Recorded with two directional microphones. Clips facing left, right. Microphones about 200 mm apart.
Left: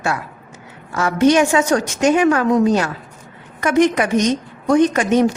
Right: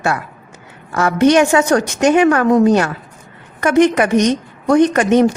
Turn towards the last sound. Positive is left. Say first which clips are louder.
# right 3 dB
turn(degrees=-60)  # may be behind; listen again after turning